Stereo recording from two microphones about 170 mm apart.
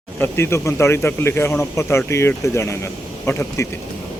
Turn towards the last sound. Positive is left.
turn(degrees=15)  # may be behind; listen again after turning